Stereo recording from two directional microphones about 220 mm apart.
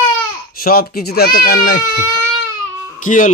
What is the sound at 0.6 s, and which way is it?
Speech, 45° left (ahead or behind).